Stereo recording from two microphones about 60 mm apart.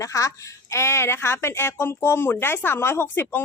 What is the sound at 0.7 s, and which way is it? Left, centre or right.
Speech, left.